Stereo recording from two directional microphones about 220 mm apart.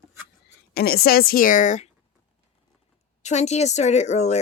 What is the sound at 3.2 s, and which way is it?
Speech, 30° left (ahead or behind).